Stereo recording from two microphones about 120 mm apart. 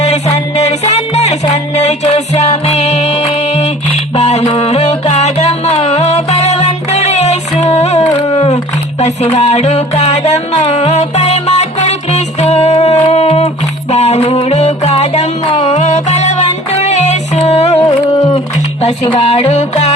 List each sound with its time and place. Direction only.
0.0 s music: 65° left (ahead or behind)